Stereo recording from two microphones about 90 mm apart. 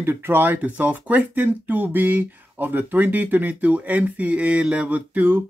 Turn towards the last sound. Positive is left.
turn(degrees=-20)  # may be behind; listen again after turning